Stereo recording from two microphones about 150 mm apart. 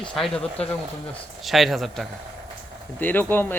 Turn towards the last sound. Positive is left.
turn(degrees=15)  # may be behind; listen again after turning